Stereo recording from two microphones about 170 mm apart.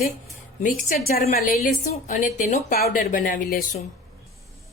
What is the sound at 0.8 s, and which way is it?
A woman's voice, 50° left (ahead or behind).